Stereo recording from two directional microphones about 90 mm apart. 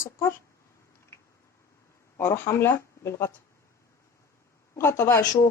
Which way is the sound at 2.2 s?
25° left (ahead or behind).